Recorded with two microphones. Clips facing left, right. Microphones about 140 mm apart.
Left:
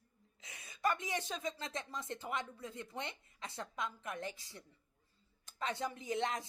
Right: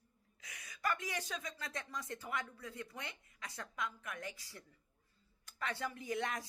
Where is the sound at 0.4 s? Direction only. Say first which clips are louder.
Left 3 dB; 25° left (ahead or behind).